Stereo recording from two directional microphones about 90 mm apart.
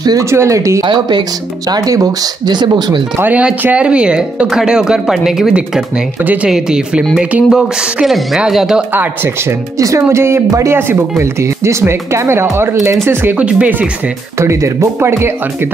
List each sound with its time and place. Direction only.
0.2 s speech: 30° right (ahead or behind)
0.8 s speech: 55° right (ahead or behind)
1.7 s speech: 45° right (ahead or behind)
3.2 s speech: 15° right (ahead or behind)
6.2 s speech: 15° right (ahead or behind)
8.9 s speech: 25° right (ahead or behind)
9.8 s speech: 35° right (ahead or behind); by 13.8 s 15° right (ahead or behind)
14.4 s speech: 35° right (ahead or behind)